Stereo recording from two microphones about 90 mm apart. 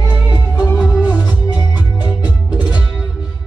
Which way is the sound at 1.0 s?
50° left (ahead or behind).